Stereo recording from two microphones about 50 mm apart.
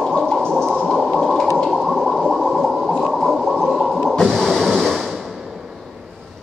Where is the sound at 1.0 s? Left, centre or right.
Centre.